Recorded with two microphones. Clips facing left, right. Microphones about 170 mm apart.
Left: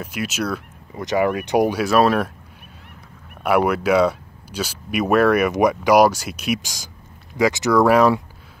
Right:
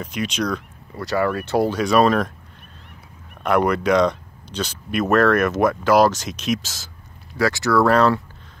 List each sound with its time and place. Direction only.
0.0 s speech: 5° left (ahead or behind)
0.9 s speech: 15° left (ahead or behind)
3.4 s speech: 5° left (ahead or behind)